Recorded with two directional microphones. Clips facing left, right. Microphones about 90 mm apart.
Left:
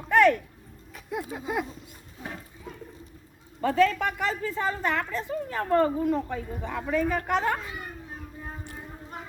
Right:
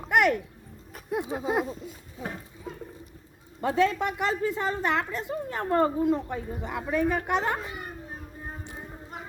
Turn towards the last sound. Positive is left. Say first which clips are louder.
# left 1 dB
turn(degrees=-20)  # may be behind; listen again after turning